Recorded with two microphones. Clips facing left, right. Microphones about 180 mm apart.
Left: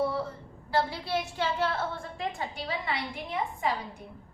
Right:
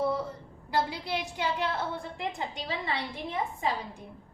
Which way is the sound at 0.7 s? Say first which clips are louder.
Left 1 dB; 15° right (ahead or behind).